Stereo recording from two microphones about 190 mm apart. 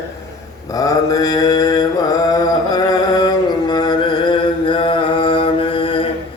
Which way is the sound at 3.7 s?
20° left (ahead or behind).